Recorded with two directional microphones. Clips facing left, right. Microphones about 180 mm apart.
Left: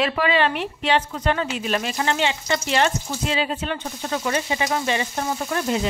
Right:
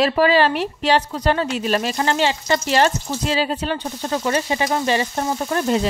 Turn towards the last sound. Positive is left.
turn(degrees=-40)  # may be behind; listen again after turning